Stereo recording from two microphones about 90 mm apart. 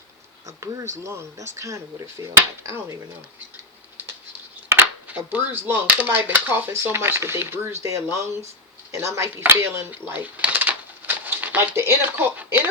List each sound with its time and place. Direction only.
0.4 s speech: 35° right (ahead or behind)
4.7 s speech: 25° right (ahead or behind)
9.9 s a sound: 20° right (ahead or behind)